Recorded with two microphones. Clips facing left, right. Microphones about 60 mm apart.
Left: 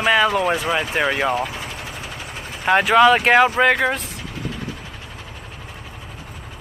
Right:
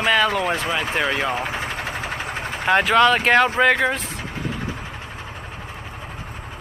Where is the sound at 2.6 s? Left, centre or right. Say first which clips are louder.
Left 2 dB; centre.